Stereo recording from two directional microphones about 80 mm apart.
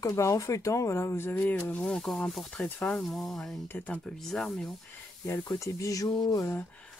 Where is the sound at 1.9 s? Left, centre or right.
Centre.